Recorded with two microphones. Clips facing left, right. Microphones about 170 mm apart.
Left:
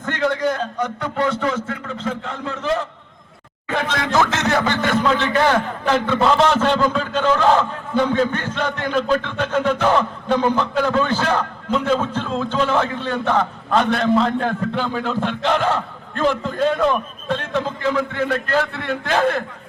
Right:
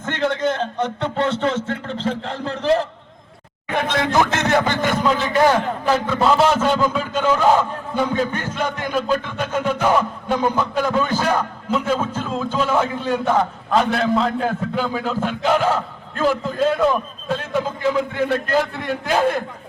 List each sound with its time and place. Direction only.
0.0 s a man's voice: 20° right (ahead or behind)
3.7 s a man's voice: 20° right (ahead or behind)